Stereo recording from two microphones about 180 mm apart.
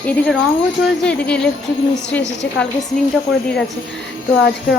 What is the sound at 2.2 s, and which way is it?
Speech, 80° left.